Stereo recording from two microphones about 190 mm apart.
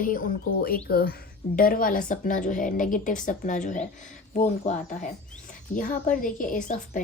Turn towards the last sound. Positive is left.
turn(degrees=40)  # may be behind; listen again after turning